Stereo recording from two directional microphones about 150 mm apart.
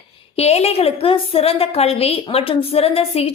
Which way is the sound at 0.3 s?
45° left (ahead or behind).